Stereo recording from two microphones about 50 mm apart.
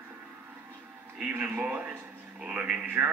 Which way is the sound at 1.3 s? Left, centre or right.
Right.